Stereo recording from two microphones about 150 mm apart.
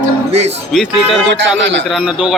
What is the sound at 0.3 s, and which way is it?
Speech, 45° right (ahead or behind).